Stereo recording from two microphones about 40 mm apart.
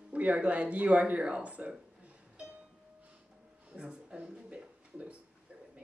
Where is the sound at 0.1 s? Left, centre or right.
Right.